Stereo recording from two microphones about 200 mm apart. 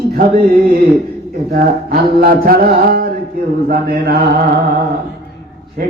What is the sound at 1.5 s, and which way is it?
Mantra, 50° right (ahead or behind).